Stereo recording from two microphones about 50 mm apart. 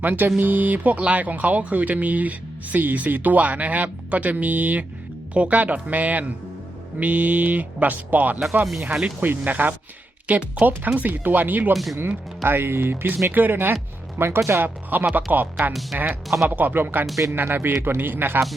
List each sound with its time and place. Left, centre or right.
0.0 s speech: right
11.7 s speech: centre
11.9 s speech: right
14.2 s speech: right
14.6 s speech: right
15.9 s speech: centre
16.5 s speech: right